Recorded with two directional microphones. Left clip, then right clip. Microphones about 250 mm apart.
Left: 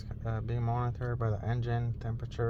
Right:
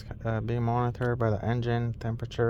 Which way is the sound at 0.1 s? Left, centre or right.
Right.